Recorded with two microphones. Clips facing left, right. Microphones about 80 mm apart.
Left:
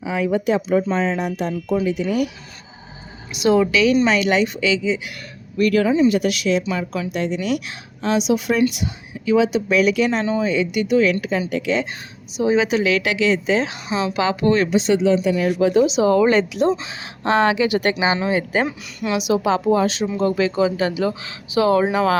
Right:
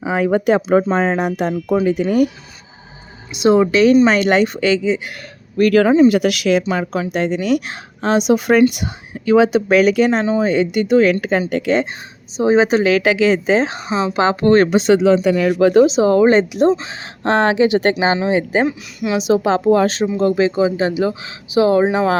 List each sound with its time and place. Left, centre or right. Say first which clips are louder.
0.0 s speech: right 4 dB; right
3.3 s speech: right 3 dB; right
3.7 s a woman's voice: right 5 dB; right
6.1 s speech: right 4 dB; right
6.7 s speech: right 4 dB; right
12.4 s a woman's voice: right 4 dB; right
14.4 s speech: right 5 dB; right
15.5 s speech: right 6 dB; right
15.9 s a woman's voice: right 3 dB; right
18.6 s speech: right 4 dB; centre
19.1 s a woman's voice: right 3 dB; right
19.7 s speech: right 4 dB; right